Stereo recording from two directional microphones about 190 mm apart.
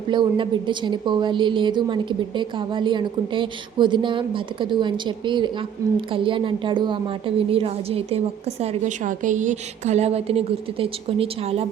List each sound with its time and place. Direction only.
0.1 s a woman's voice: 25° right (ahead or behind)